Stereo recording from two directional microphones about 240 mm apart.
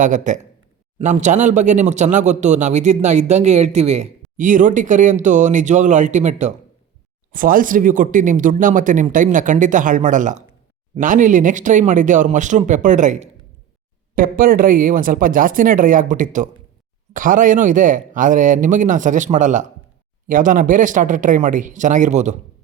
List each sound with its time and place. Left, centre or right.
0.0 s speech: right